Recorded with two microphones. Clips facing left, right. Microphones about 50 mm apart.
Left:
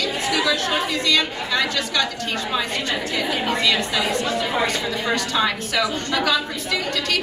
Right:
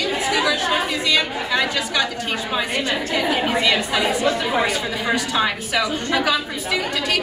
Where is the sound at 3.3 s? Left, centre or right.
Centre.